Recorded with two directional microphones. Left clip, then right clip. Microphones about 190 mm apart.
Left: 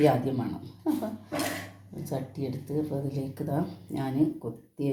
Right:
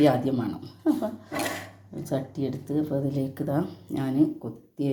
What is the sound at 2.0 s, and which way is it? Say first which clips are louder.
Speech: right 4 dB; 30° right (ahead or behind).